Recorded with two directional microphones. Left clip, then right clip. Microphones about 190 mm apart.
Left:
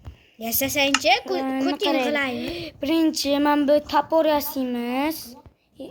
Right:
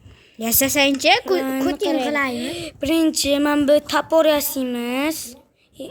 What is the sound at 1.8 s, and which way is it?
Speech, 20° right (ahead or behind).